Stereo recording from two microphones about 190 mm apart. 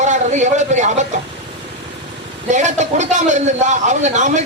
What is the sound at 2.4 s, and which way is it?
A man's voice, 40° right (ahead or behind).